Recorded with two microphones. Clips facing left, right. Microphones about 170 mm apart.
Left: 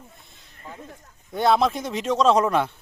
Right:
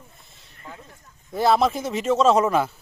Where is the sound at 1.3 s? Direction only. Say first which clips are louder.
Right 1 dB; centre (ahead or behind).